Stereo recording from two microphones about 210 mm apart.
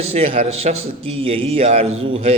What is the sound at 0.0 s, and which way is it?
A man's voice, 30° right (ahead or behind).